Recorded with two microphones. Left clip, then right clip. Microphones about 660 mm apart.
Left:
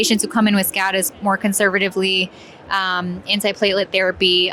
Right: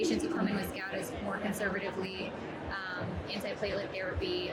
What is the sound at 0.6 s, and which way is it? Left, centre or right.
Speech, left.